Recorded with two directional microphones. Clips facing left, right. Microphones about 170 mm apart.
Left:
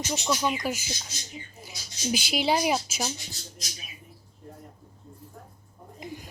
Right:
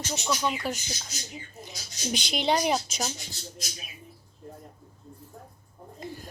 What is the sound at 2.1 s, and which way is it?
Speech, 5° left (ahead or behind).